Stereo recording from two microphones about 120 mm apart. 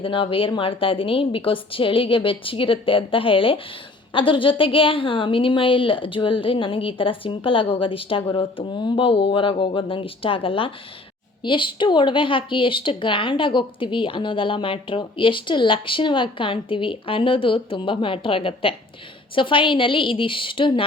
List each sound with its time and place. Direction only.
0.0 s speech: 45° left (ahead or behind)